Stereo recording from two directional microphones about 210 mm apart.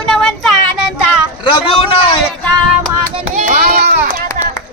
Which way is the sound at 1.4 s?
25° left (ahead or behind).